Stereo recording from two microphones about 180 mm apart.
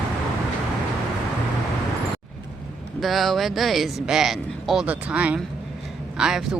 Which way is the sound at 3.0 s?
Centre (ahead or behind).